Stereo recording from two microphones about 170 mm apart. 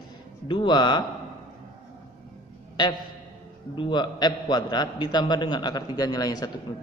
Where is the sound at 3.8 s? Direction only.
25° left (ahead or behind).